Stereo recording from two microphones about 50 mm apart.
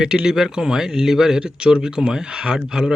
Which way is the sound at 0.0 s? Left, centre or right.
Centre.